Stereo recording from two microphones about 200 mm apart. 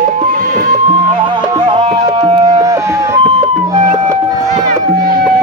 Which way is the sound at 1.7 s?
25° right (ahead or behind).